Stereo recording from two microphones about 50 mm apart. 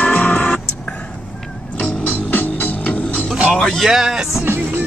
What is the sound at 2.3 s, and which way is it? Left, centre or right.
Music, left.